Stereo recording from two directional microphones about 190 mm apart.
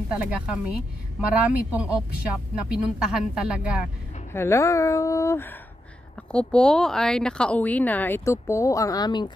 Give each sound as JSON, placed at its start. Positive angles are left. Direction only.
{"t": 0.1, "sound": "a woman's voice", "side_deg": -5}
{"t": 4.3, "sound": "a woman's voice", "side_deg": 15}